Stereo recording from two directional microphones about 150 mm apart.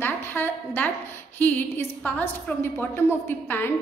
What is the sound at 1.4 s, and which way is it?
A woman's voice, 10° left (ahead or behind).